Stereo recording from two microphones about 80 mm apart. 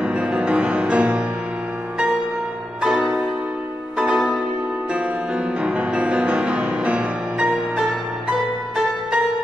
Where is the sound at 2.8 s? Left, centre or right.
Centre.